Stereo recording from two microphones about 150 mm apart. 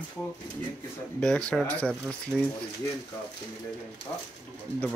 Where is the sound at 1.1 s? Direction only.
5° left (ahead or behind).